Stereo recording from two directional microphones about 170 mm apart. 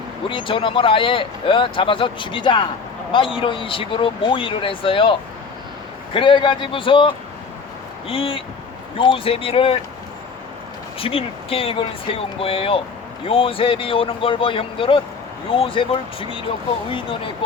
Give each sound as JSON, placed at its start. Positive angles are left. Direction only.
{"t": 0.3, "sound": "speech", "side_deg": 30}
{"t": 6.1, "sound": "speech", "side_deg": 30}
{"t": 11.0, "sound": "speech", "side_deg": 35}